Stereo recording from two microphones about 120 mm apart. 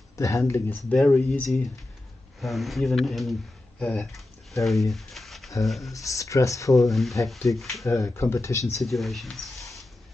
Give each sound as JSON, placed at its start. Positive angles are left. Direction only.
{"t": 0.1, "sound": "speech", "side_deg": 25}
{"t": 2.4, "sound": "speech", "side_deg": 0}
{"t": 4.9, "sound": "a sound", "side_deg": 0}
{"t": 5.7, "sound": "speech", "side_deg": 0}
{"t": 5.9, "sound": "speech", "side_deg": 25}
{"t": 6.8, "sound": "speech", "side_deg": 0}
{"t": 7.8, "sound": "speech", "side_deg": 25}
{"t": 8.8, "sound": "speech", "side_deg": 0}